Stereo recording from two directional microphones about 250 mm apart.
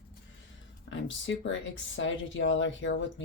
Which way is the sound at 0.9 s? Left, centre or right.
Left.